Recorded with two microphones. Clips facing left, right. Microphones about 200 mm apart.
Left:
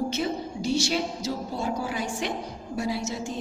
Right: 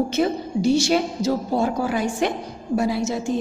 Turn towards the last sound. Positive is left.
turn(degrees=-55)  # may be behind; listen again after turning